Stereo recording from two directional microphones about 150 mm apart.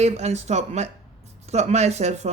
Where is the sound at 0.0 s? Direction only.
45° right (ahead or behind).